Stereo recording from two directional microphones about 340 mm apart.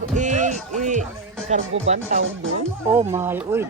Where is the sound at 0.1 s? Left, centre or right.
Right.